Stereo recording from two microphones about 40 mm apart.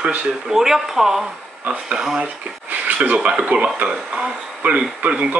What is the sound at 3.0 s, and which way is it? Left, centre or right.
Speech, right.